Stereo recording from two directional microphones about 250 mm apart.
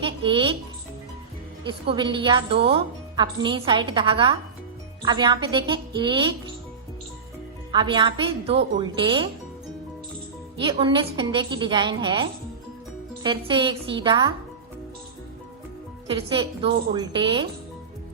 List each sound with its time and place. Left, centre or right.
0.0 s a woman's voice: centre
1.6 s a woman's voice: centre
7.7 s a woman's voice: centre
10.6 s a woman's voice: centre
16.0 s a woman's voice: right